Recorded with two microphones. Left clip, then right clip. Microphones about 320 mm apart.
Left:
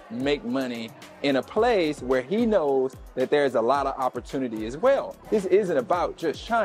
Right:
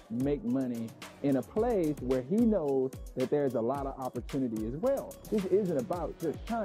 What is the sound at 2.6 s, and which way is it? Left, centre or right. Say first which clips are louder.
Speech: left 7 dB; left.